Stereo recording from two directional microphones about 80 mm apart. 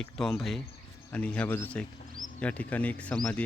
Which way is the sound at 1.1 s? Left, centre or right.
Centre.